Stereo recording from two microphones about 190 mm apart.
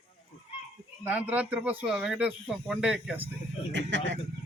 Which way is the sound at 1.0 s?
10° right (ahead or behind).